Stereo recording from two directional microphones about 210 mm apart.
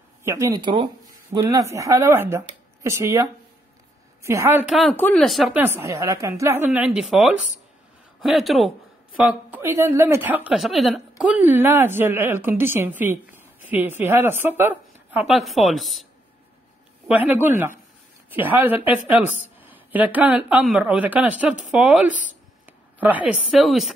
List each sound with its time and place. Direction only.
0.2 s speech: 15° right (ahead or behind)
17.1 s speech: 10° right (ahead or behind)
22.7 s a sound: 10° right (ahead or behind)
23.4 s speech: centre (ahead or behind)